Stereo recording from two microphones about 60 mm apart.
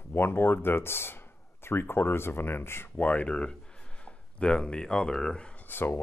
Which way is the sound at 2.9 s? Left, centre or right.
Left.